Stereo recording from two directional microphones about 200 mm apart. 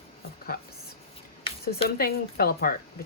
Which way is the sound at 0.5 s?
45° left (ahead or behind).